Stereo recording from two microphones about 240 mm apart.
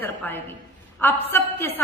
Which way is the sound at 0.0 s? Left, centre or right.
Centre.